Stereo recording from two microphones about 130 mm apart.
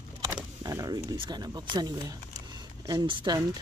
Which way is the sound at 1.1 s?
35° right (ahead or behind).